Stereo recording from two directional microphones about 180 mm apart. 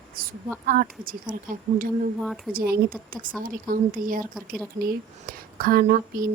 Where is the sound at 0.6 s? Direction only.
50° right (ahead or behind).